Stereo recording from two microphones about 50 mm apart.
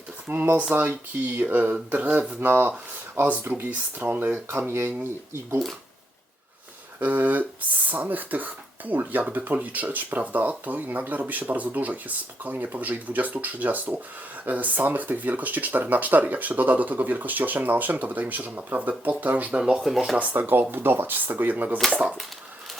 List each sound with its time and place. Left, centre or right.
0.3 s speech: right
0.7 s speech: right
1.3 s speech: right
4.4 s speech: right
7.0 s speech: right
19.6 s speech: centre
20.4 s speech: right